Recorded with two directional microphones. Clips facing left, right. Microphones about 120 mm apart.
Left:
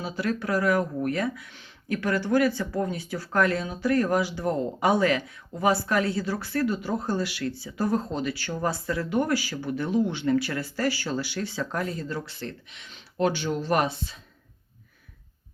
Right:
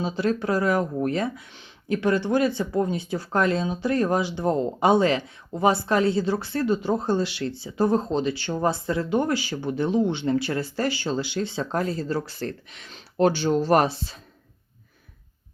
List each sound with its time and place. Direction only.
0.0 s speech: 25° right (ahead or behind)